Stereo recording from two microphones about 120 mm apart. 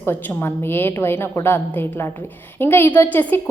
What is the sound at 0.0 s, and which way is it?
A woman's voice, 15° left (ahead or behind).